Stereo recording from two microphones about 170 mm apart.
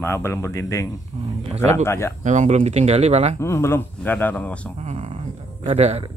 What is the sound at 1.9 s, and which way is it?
Speech, 15° left (ahead or behind).